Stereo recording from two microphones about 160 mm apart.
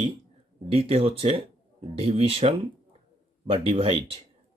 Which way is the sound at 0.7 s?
40° right (ahead or behind).